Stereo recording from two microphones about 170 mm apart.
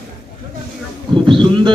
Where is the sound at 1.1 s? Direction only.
30° right (ahead or behind).